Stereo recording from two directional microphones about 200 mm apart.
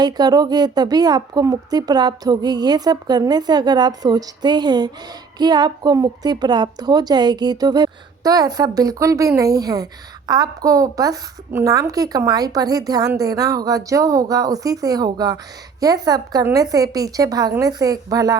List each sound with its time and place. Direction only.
0.0 s a woman's voice: 20° right (ahead or behind)